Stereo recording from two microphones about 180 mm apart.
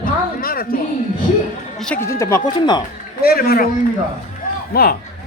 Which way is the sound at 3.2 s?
60° left (ahead or behind).